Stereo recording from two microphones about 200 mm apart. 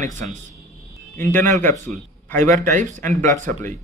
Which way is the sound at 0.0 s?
35° right (ahead or behind).